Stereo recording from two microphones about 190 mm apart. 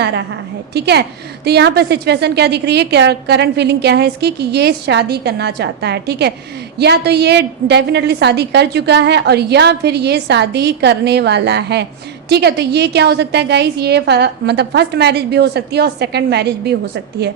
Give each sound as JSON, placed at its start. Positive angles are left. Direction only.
{"t": 0.0, "sound": "a woman's voice", "side_deg": -60}